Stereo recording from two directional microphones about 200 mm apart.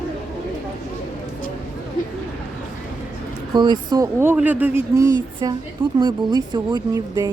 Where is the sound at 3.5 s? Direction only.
20° right (ahead or behind).